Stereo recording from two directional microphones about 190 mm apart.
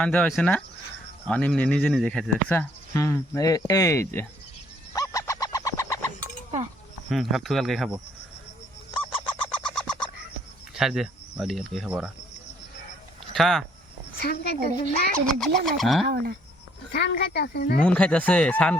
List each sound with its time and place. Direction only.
0.0 s speech: 5° left (ahead or behind)
4.9 s a sound: 15° left (ahead or behind)
7.1 s speech: centre (ahead or behind)
8.9 s goose: 25° left (ahead or behind)
9.4 s a sound: 5° left (ahead or behind)
10.8 s speech: centre (ahead or behind)
13.3 s speech: centre (ahead or behind)
14.2 s a woman's voice: 55° left (ahead or behind)
14.5 s speech: 50° right (ahead or behind)
15.3 s speech: centre (ahead or behind)
16.9 s speech: 60° left (ahead or behind)
17.8 s speech: 5° left (ahead or behind)